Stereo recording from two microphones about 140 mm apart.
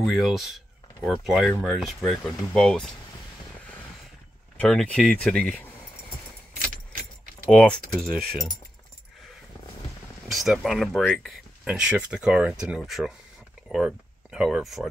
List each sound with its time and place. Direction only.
0.0 s speech: centre (ahead or behind)
4.6 s speech: 5° left (ahead or behind)
6.5 s keys jangling: 75° right (ahead or behind)
7.5 s speech: 5° left (ahead or behind)
10.2 s speech: centre (ahead or behind)